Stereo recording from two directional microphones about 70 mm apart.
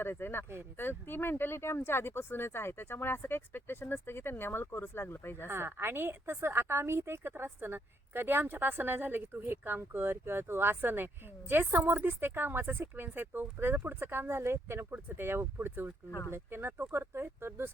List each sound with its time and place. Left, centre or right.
0.0 s speech: left
5.5 s a woman's voice: right